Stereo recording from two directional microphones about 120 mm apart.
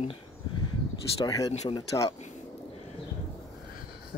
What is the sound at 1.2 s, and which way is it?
Speech, 30° left (ahead or behind).